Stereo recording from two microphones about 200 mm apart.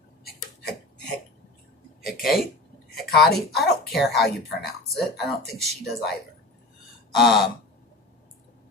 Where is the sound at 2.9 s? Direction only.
Centre (ahead or behind).